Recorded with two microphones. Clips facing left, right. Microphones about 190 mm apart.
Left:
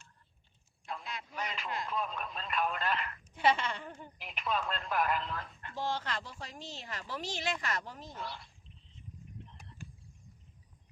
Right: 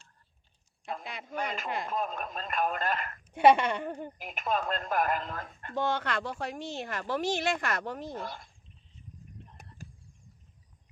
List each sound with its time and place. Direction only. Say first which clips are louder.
0.9 s speech: right 4 dB; 55° right (ahead or behind)
3.3 s a woman's voice: right 8 dB; 65° right (ahead or behind)
4.2 s speech: right 3 dB; 45° right (ahead or behind)
9.5 s a sound: right 1 dB; 45° right (ahead or behind)